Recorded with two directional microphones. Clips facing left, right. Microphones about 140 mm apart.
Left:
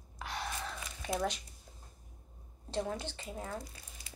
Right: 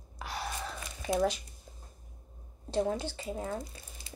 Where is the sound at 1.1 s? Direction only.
5° right (ahead or behind).